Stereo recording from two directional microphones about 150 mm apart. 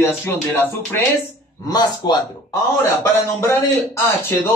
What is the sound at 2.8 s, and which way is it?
Speech, 15° left (ahead or behind).